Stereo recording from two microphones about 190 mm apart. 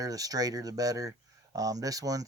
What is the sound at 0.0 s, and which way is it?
Speech, 20° right (ahead or behind).